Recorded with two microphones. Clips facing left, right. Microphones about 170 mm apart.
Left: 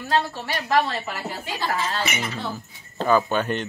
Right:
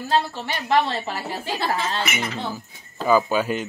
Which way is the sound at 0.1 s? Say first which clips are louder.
Right 1 dB; 30° right (ahead or behind).